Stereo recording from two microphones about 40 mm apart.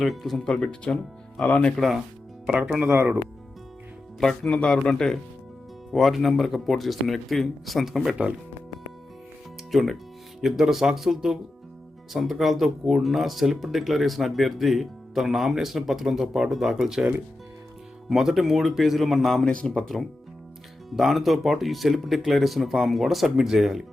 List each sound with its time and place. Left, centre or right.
0.0 s speech: centre
0.4 s speech: left
1.7 s speech: centre
2.6 s speech: right
4.4 s speech: centre
5.9 s speech: centre
9.7 s speech: centre
19.5 s speech: centre
20.9 s speech: centre